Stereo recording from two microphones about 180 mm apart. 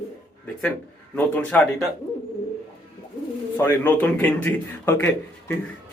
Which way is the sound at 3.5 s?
10° left (ahead or behind).